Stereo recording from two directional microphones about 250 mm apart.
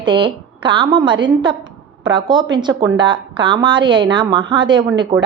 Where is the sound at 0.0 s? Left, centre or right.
Centre.